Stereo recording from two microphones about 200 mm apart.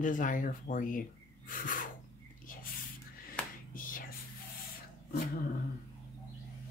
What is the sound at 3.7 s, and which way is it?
Hands, 45° left (ahead or behind).